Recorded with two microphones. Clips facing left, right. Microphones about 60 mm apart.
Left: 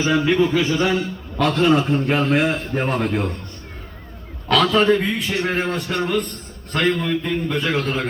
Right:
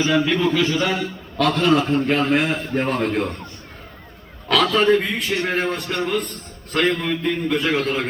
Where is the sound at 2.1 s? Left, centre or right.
Centre.